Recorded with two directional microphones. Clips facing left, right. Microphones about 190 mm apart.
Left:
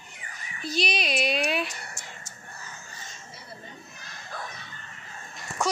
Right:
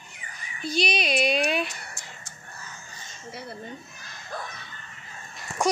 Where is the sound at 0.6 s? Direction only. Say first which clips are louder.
Right 2 dB; centre (ahead or behind).